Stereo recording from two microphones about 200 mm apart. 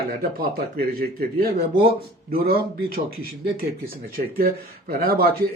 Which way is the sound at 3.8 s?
50° right (ahead or behind).